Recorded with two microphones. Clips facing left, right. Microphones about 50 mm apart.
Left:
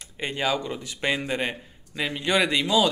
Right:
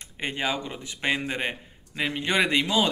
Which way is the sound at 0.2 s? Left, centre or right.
Right.